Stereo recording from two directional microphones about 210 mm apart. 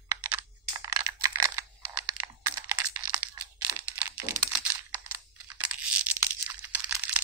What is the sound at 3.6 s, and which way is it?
Computer keyboard, 10° right (ahead or behind).